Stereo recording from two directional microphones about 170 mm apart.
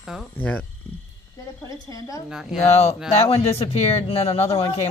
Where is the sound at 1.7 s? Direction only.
20° left (ahead or behind).